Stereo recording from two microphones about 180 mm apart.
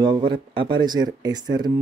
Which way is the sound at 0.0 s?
25° right (ahead or behind).